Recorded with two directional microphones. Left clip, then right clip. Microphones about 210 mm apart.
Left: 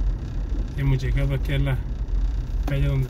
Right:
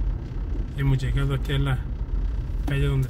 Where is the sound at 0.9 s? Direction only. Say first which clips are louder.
Left 1 dB; 25° right (ahead or behind).